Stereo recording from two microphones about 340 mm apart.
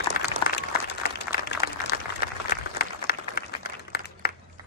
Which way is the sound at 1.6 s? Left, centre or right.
Left.